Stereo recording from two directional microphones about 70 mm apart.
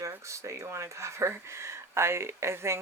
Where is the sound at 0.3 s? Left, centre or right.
Right.